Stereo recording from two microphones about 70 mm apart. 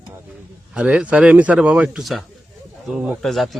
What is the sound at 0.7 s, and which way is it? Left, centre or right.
Speech, centre.